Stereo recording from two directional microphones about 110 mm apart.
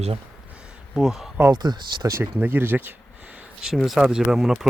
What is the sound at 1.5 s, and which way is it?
Speech, 40° right (ahead or behind).